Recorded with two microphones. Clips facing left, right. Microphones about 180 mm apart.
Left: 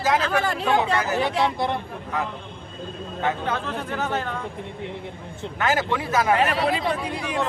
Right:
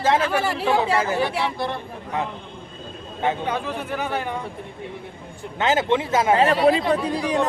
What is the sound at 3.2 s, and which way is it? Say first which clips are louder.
Speech: right 2 dB; 15° right (ahead or behind).